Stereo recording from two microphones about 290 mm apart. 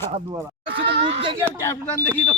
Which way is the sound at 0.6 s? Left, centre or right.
Right.